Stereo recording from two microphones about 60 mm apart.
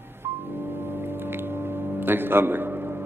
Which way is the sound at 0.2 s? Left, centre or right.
Right.